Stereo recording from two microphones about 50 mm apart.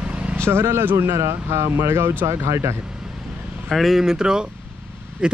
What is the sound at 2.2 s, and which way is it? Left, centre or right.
Speech, right.